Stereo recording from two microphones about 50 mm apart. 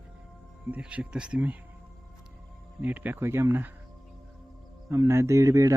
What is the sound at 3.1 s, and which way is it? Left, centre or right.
Speech, right.